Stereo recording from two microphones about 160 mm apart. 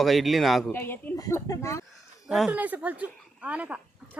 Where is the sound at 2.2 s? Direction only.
5° right (ahead or behind).